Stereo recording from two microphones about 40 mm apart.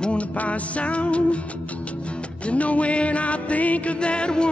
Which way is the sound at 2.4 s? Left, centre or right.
Left.